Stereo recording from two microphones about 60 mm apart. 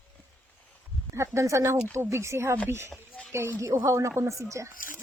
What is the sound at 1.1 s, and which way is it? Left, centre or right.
Speech, right.